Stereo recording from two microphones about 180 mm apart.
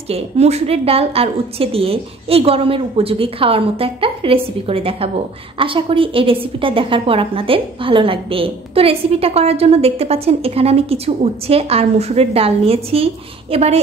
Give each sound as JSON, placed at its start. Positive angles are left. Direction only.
{"t": 0.1, "sound": "a woman's voice", "side_deg": -35}